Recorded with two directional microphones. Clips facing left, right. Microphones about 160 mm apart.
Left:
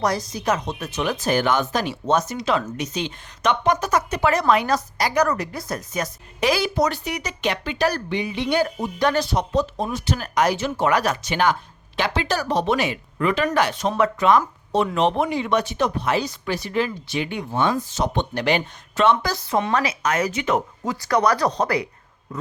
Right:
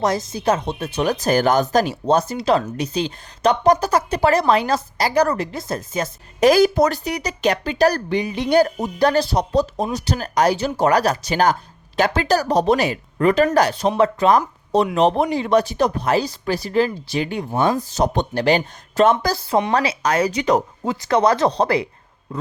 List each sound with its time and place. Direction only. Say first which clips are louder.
0.0 s speech: right 3 dB; 25° right (ahead or behind)
6.4 s a woman's voice: right 7 dB; 45° right (ahead or behind)
7.0 s speech: right 5 dB; 35° right (ahead or behind)